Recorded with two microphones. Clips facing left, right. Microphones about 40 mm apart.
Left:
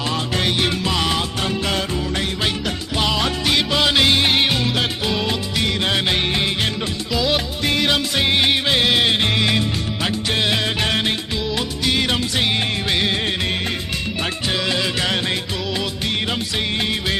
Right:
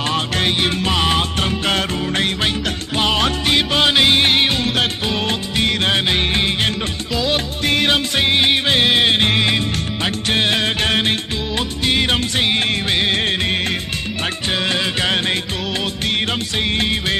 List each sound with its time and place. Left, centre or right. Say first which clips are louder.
0.1 s music: right 2 dB; right
1.4 s music: right 3 dB; right
3.0 s music: right 3 dB; right
4.3 s music: right 2 dB; centre
4.6 s music: right 2 dB; right
5.8 s music: right 2 dB; right
7.1 s music: even; centre
7.6 s music: right 3 dB; right
8.2 s music: right 1 dB; centre
8.6 s music: right 2 dB; right
12.9 s music of bollywood: right 1 dB; right
14.5 s music: right 2 dB; right
16.3 s music: right 2 dB; centre